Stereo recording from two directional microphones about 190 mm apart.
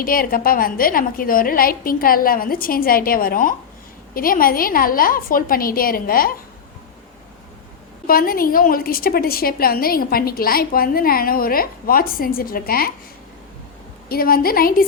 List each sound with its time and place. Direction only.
0.0 s a woman's voice: 50° left (ahead or behind)
8.0 s a woman's voice: 50° left (ahead or behind)
14.1 s a woman's voice: 50° left (ahead or behind)